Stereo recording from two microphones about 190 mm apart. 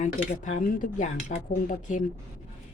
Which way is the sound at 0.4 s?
40° left (ahead or behind).